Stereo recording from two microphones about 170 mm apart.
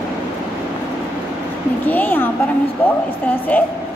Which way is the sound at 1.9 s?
10° left (ahead or behind).